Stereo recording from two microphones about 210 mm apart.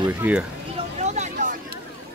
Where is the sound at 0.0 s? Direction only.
10° right (ahead or behind).